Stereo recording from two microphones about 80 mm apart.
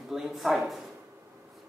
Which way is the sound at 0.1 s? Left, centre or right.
Centre.